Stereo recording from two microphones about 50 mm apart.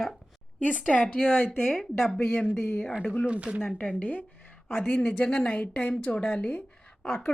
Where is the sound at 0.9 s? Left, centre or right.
Left.